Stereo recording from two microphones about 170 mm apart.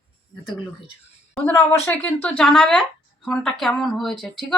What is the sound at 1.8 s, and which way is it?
Speech, 10° left (ahead or behind).